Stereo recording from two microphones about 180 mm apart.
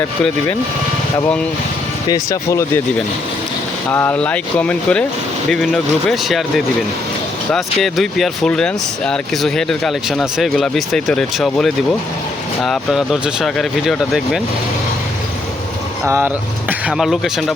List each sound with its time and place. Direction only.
2.0 s speech: 20° left (ahead or behind)
3.9 s speech: 10° left (ahead or behind)
7.5 s speech: centre (ahead or behind)
16.0 s speech: 10° right (ahead or behind)